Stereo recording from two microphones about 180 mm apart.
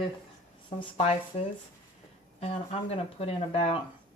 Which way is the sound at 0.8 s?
35° left (ahead or behind).